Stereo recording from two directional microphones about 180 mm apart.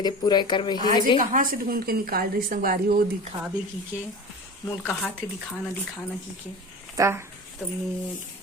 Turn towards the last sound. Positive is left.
turn(degrees=-15)  # may be behind; listen again after turning